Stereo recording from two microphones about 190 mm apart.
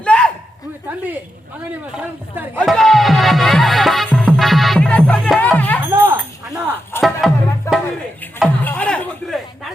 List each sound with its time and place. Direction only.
0.0 s a sound: 5° left (ahead or behind)
0.9 s speech: 10° right (ahead or behind)
2.6 s music: centre (ahead or behind)
5.8 s a sound: 15° right (ahead or behind)
7.0 s music: centre (ahead or behind)
7.7 s music: 15° left (ahead or behind)